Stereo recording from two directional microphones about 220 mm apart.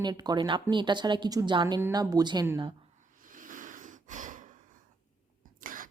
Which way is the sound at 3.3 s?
35° right (ahead or behind).